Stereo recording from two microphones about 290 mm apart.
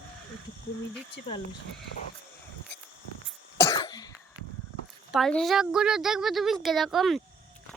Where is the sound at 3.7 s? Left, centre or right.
Centre.